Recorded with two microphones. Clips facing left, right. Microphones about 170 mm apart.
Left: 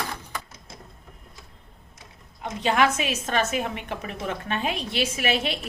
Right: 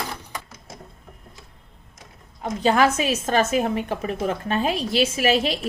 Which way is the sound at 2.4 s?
35° right (ahead or behind).